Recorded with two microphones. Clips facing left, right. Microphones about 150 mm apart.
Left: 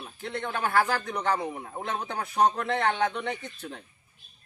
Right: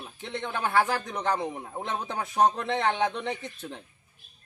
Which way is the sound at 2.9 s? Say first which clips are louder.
Right 1 dB; 15° right (ahead or behind).